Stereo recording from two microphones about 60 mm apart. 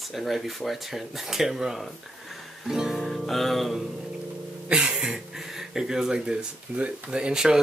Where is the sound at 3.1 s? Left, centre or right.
Centre.